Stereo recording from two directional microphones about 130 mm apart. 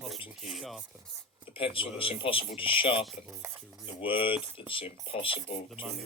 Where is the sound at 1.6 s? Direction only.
45° left (ahead or behind).